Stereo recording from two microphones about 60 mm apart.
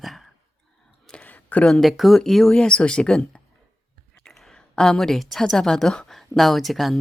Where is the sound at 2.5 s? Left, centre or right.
Centre.